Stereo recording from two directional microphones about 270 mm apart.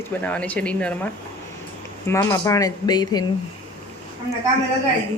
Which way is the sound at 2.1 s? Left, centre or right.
Centre.